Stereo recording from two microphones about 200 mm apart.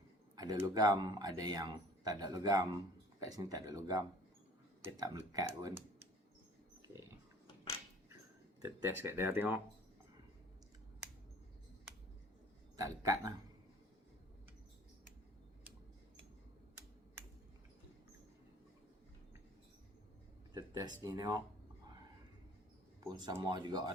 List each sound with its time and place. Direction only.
0.3 s speech: 20° right (ahead or behind)
8.6 s speech: 15° right (ahead or behind)
12.7 s speech: 15° right (ahead or behind)
20.5 s speech: 20° right (ahead or behind)
23.0 s speech: 20° right (ahead or behind)